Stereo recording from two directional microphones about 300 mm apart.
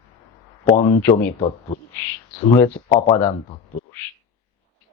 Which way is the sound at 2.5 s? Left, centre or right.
Centre.